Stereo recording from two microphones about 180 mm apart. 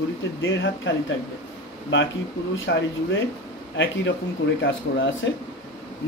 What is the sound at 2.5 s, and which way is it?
Speech, 90° left.